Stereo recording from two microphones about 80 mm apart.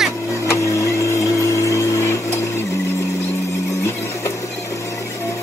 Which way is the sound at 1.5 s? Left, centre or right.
Left.